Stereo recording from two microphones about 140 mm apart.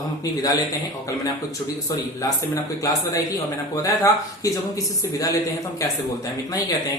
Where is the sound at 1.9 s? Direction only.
25° left (ahead or behind).